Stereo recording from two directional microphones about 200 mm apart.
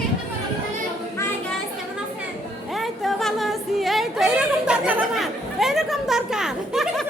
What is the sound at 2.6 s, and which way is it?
Music, centre (ahead or behind).